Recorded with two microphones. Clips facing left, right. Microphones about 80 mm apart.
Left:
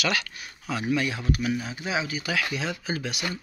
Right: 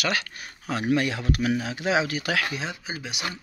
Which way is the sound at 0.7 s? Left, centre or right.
Right.